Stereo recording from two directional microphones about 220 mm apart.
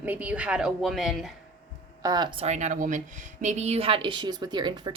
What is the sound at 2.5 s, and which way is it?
A woman's voice, 35° right (ahead or behind).